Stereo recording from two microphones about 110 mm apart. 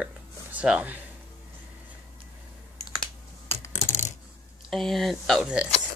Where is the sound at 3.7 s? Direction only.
90° left.